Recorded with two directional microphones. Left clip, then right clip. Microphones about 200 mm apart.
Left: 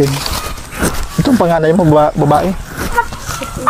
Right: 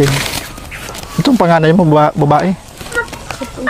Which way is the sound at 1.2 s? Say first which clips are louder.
Right 1 dB; 15° left (ahead or behind).